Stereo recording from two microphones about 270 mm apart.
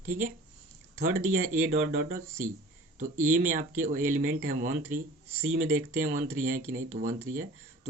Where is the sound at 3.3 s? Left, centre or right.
Right.